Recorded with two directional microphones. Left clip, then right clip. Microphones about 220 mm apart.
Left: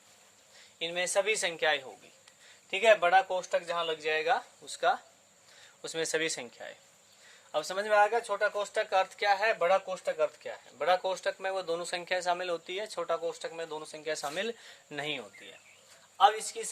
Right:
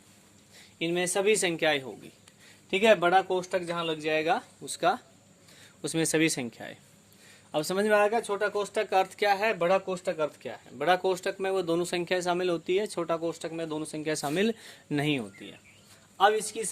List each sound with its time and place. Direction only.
0.8 s speech: 25° right (ahead or behind)
3.4 s speech: 10° right (ahead or behind); by 8.2 s 30° right (ahead or behind)
8.3 s speech: 20° right (ahead or behind)
9.6 s speech: 15° right (ahead or behind); by 15.2 s 35° right (ahead or behind)
16.2 s speech: 10° right (ahead or behind)